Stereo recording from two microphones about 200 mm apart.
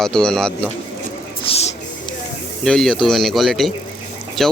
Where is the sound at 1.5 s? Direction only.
30° left (ahead or behind).